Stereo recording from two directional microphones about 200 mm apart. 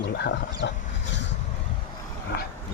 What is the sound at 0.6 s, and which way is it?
Speech, 65° left (ahead or behind).